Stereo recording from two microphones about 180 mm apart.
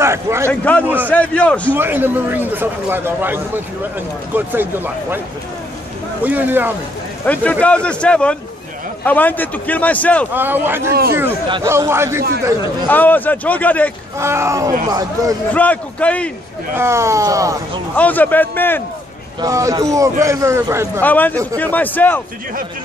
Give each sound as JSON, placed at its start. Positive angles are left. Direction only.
{"t": 0.0, "sound": "a man's voice", "side_deg": -15}
{"t": 0.5, "sound": "a man's voice", "side_deg": 10}
{"t": 1.7, "sound": "speech", "side_deg": -10}
{"t": 6.2, "sound": "speech", "side_deg": -10}
{"t": 7.2, "sound": "a man's voice", "side_deg": 5}
{"t": 10.3, "sound": "speech", "side_deg": -10}
{"t": 12.8, "sound": "a man's voice", "side_deg": 10}
{"t": 14.1, "sound": "a man's voice", "side_deg": -15}
{"t": 15.5, "sound": "a man's voice", "side_deg": 10}
{"t": 16.7, "sound": "speech", "side_deg": -15}
{"t": 17.9, "sound": "a man's voice", "side_deg": 10}
{"t": 19.4, "sound": "speech", "side_deg": -20}
{"t": 21.0, "sound": "a man's voice", "side_deg": 10}